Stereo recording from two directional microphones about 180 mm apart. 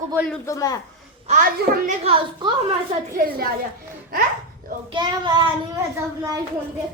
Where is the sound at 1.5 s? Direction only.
55° right (ahead or behind).